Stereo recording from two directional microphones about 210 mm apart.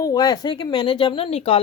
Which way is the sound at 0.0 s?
15° left (ahead or behind).